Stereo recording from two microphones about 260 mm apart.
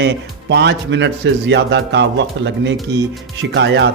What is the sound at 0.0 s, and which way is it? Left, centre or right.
Speech, right.